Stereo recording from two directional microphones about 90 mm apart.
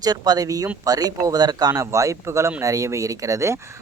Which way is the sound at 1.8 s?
35° right (ahead or behind).